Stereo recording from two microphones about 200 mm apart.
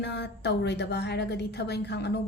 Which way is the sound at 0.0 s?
60° left (ahead or behind).